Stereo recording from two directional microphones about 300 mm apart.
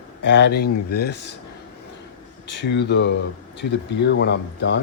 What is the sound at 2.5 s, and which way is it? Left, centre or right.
Speech, left.